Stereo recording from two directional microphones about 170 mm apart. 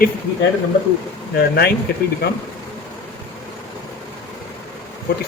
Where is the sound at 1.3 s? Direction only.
65° left (ahead or behind).